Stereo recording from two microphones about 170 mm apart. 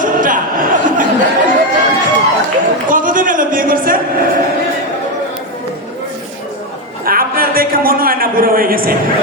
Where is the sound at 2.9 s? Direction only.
50° right (ahead or behind).